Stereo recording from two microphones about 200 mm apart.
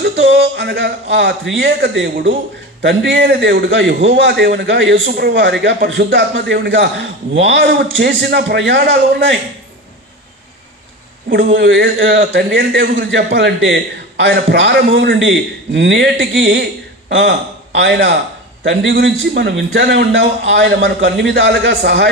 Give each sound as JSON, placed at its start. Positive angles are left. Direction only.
{"t": 0.0, "sound": "a man's voice", "side_deg": -60}
{"t": 11.2, "sound": "a man's voice", "side_deg": -60}